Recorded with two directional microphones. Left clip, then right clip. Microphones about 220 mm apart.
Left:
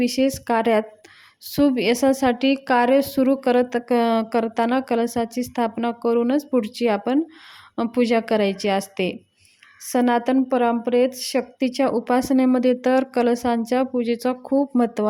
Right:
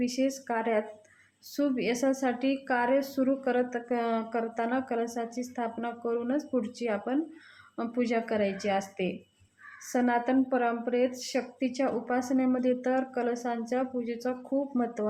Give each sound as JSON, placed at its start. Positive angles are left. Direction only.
{"t": 0.0, "sound": "a woman's voice", "side_deg": 40}